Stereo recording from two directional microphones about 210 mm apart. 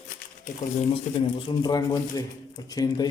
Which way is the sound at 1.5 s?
20° left (ahead or behind).